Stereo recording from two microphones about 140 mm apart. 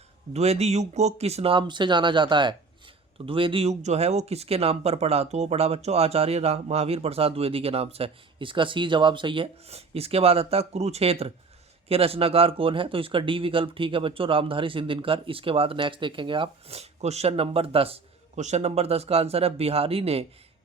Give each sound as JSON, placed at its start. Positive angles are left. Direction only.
{"t": 0.3, "sound": "speech", "side_deg": -50}